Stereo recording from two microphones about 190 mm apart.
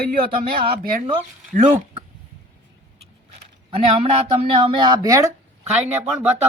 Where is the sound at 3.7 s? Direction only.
30° right (ahead or behind).